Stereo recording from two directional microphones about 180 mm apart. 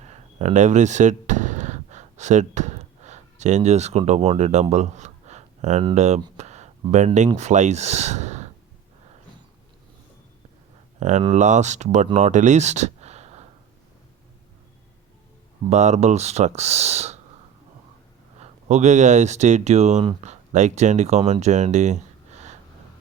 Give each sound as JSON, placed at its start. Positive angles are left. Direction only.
{"t": 0.0, "sound": "a sound", "side_deg": -40}
{"t": 5.9, "sound": "speech", "side_deg": -40}
{"t": 6.3, "sound": "a sound", "side_deg": -40}
{"t": 7.3, "sound": "speech", "side_deg": -40}
{"t": 11.0, "sound": "speech", "side_deg": -40}
{"t": 15.7, "sound": "speech", "side_deg": -40}
{"t": 18.3, "sound": "speech", "side_deg": -40}